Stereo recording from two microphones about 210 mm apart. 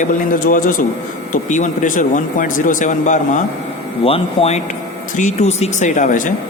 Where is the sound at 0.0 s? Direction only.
40° left (ahead or behind).